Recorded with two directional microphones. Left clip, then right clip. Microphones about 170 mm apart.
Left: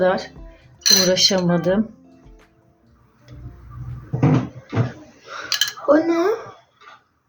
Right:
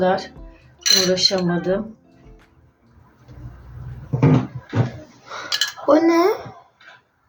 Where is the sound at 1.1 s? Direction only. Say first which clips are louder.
Left 1 dB; 50° left (ahead or behind).